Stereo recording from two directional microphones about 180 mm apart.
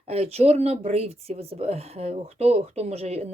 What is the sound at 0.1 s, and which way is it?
Speech, 35° right (ahead or behind).